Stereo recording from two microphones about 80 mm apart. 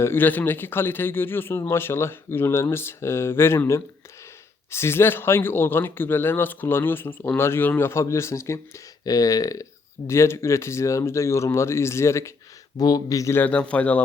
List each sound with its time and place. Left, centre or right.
0.0 s speech: left
9.0 s speech: left
10.1 s speech: left
12.7 s speech: left
13.3 s speech: centre